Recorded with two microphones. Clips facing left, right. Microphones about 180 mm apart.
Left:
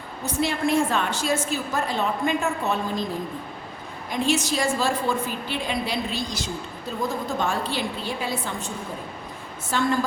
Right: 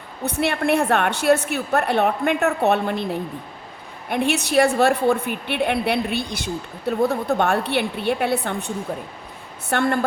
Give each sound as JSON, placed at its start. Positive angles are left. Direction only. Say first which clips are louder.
{"t": 0.3, "sound": "a woman's voice", "louder": "right 3 dB", "side_deg": -65}